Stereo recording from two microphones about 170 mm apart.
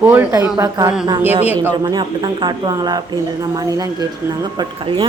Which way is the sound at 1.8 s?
25° right (ahead or behind).